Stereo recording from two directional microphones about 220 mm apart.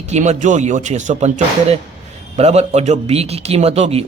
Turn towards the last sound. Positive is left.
turn(degrees=-30)  # may be behind; listen again after turning